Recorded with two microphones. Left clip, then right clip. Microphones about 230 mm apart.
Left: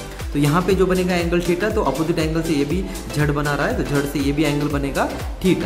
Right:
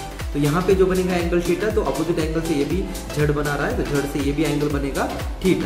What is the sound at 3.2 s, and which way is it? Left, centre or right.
Speech, left.